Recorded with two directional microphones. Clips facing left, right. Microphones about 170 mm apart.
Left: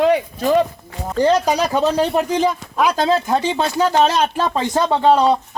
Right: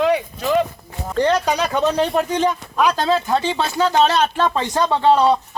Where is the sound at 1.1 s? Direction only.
10° left (ahead or behind).